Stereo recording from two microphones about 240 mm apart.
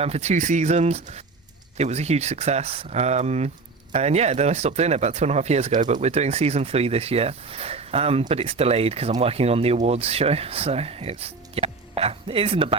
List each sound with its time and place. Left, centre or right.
0.0 s speech: right